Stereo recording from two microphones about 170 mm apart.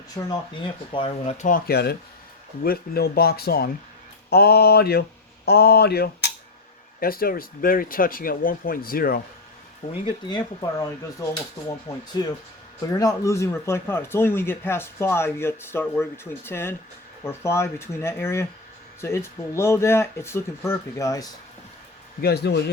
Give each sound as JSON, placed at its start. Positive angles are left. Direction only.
{"t": 0.1, "sound": "speech", "side_deg": 20}
{"t": 1.4, "sound": "speech", "side_deg": 55}
{"t": 4.3, "sound": "a sound", "side_deg": 70}
{"t": 7.0, "sound": "speech", "side_deg": 60}
{"t": 9.9, "sound": "speech", "side_deg": 25}
{"t": 22.2, "sound": "a sound", "side_deg": 70}